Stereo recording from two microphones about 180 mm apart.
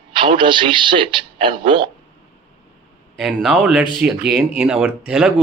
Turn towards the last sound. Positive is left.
turn(degrees=-5)  # may be behind; listen again after turning